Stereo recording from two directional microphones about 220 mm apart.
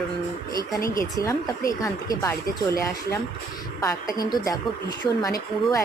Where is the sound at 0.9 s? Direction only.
15° left (ahead or behind).